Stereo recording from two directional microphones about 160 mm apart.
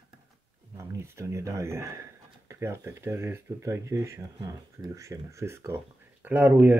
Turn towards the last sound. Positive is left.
turn(degrees=-10)  # may be behind; listen again after turning